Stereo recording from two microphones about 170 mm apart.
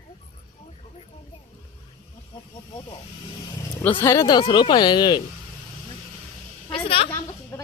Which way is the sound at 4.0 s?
20° left (ahead or behind).